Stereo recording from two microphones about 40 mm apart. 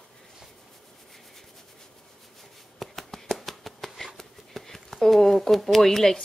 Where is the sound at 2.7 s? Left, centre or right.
Centre.